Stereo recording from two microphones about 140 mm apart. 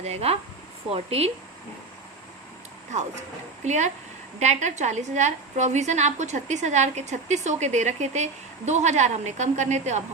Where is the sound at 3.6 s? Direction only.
55° right (ahead or behind).